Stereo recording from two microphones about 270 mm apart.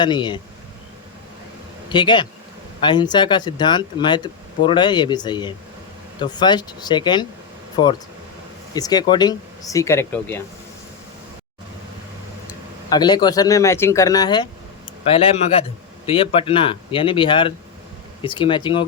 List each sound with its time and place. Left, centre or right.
0.0 s speech: centre
1.9 s speech: centre
8.7 s speech: centre
12.9 s speech: centre
16.0 s speech: centre